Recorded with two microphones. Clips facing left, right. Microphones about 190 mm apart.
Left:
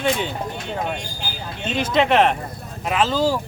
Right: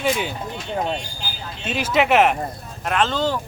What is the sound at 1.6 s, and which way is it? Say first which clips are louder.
Speech: left 1 dB; 5° right (ahead or behind).